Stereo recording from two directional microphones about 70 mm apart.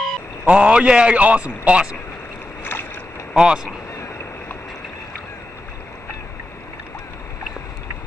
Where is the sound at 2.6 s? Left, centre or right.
Left.